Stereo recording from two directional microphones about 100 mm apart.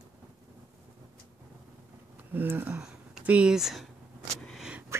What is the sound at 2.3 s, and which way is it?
Speech, 20° right (ahead or behind).